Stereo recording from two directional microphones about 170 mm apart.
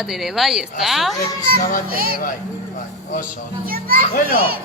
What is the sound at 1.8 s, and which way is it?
Speech, 60° right (ahead or behind).